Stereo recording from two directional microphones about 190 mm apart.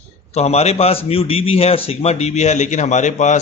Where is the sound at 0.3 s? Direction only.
35° left (ahead or behind).